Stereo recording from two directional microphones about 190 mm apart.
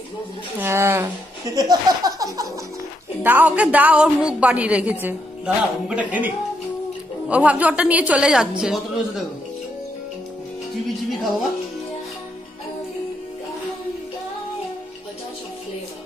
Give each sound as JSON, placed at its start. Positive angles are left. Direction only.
{"t": 0.6, "sound": "a woman's voice", "side_deg": -10}
{"t": 1.5, "sound": "a sound", "side_deg": -20}
{"t": 3.3, "sound": "a woman's voice", "side_deg": -10}